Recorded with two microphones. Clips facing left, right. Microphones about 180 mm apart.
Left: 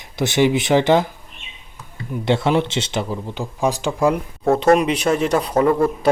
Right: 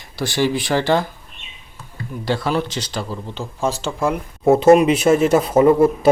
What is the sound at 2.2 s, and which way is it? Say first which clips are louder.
Speech: left 3 dB; 25° left (ahead or behind).